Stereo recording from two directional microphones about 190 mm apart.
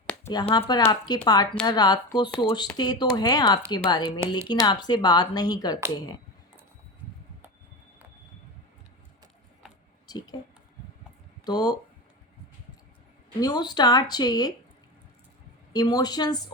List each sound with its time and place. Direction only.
0.1 s a sound: 15° left (ahead or behind)
0.4 s speech: 25° left (ahead or behind)
10.1 s a sound: 20° left (ahead or behind)
11.4 s speech: 20° left (ahead or behind)
13.4 s speech: 20° left (ahead or behind)
15.7 s speech: 20° left (ahead or behind)